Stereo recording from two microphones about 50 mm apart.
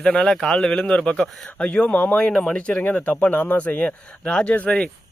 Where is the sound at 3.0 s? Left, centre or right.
Left.